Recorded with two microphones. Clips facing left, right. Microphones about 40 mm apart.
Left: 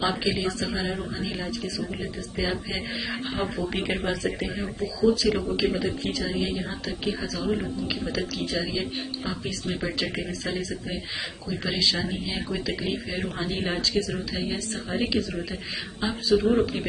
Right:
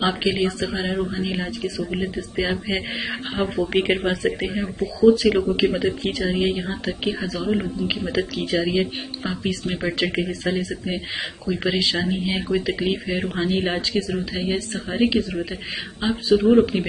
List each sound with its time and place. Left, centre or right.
0.0 s speech: right
6.6 s speech: right
7.2 s speech: right
9.7 s speech: right
9.9 s speech: right